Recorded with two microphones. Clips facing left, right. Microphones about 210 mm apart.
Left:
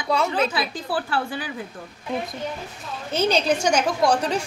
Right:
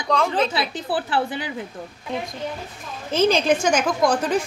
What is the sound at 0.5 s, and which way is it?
Speech, 20° right (ahead or behind).